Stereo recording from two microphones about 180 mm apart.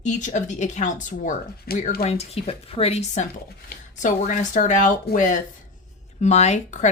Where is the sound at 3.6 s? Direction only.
50° left (ahead or behind).